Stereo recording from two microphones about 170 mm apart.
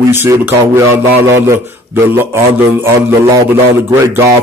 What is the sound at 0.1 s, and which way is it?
A man's voice, 15° right (ahead or behind).